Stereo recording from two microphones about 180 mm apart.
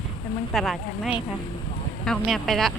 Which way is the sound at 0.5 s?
Centre (ahead or behind).